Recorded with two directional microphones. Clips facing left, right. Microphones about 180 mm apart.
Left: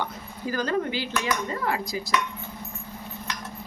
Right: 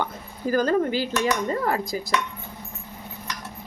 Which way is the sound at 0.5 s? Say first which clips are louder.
Right 5 dB; 45° right (ahead or behind).